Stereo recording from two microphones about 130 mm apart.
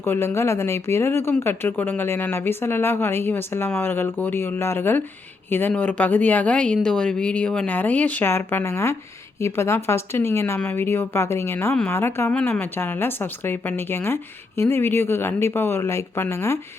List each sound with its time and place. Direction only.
0.0 s a woman's voice: 20° left (ahead or behind)